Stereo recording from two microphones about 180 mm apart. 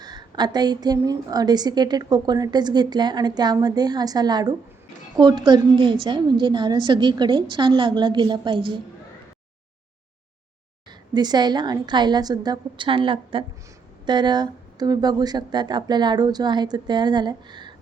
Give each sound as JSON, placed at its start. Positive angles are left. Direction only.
{"t": 0.0, "sound": "a woman's voice", "side_deg": -25}
{"t": 11.1, "sound": "a woman's voice", "side_deg": -25}